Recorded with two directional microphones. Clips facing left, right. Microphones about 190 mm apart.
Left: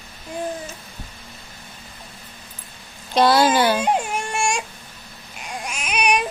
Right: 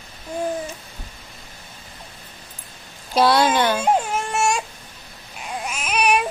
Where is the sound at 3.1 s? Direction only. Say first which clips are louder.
Left 1 dB; centre (ahead or behind).